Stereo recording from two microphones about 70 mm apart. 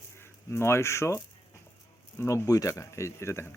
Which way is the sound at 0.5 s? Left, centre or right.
Left.